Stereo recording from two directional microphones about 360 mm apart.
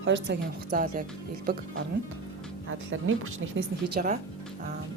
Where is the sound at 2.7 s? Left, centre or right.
Right.